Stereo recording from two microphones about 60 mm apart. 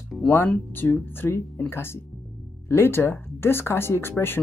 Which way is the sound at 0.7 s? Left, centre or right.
Left.